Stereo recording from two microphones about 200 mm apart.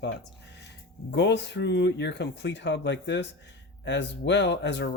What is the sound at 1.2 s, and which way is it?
Speech, 60° left (ahead or behind).